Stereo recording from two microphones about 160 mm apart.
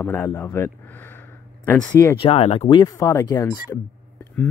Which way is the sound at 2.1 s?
35° left (ahead or behind).